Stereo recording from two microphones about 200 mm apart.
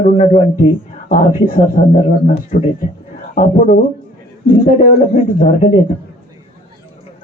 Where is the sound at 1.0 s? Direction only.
40° left (ahead or behind).